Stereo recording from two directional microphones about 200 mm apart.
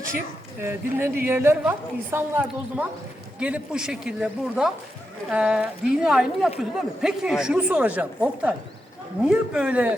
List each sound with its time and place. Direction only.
0.6 s a woman's voice: 10° right (ahead or behind)